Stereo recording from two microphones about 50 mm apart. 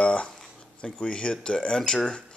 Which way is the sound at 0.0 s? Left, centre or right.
Left.